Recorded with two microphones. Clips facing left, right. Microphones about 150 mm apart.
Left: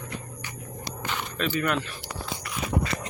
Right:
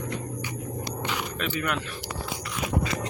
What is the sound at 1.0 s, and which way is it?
Scrape, 10° right (ahead or behind).